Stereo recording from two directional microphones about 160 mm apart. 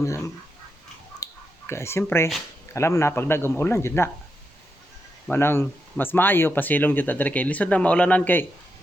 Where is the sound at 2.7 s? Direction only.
15° left (ahead or behind).